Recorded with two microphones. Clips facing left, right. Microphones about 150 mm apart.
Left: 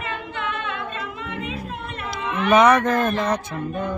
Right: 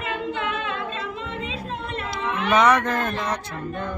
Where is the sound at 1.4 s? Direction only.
25° right (ahead or behind).